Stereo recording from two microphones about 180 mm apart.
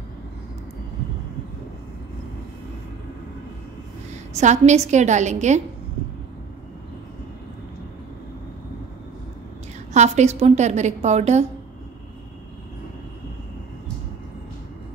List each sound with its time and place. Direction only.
4.4 s a woman's voice: 40° right (ahead or behind)
9.9 s a woman's voice: 40° right (ahead or behind)